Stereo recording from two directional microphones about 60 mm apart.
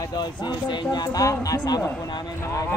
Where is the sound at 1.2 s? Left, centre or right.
Left.